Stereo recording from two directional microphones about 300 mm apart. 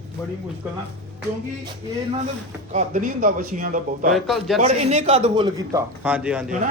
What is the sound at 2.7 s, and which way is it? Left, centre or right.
Speech, right.